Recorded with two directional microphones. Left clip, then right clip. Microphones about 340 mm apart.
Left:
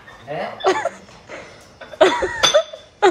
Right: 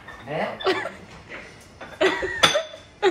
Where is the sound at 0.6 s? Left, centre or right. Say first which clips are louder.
Left 6 dB; centre.